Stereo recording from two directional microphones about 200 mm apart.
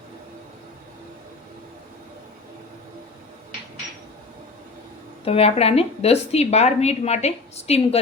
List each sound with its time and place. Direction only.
5.2 s a woman's voice: 30° left (ahead or behind)